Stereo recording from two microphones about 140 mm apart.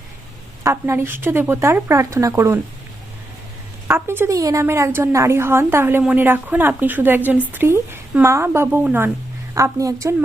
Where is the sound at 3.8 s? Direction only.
15° right (ahead or behind).